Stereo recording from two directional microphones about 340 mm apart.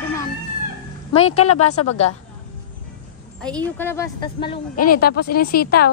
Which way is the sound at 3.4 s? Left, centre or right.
Centre.